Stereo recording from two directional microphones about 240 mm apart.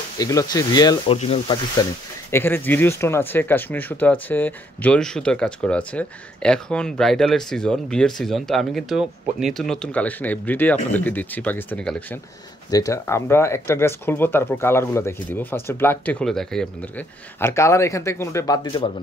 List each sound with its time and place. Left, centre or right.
0.2 s speech: centre
2.3 s speech: centre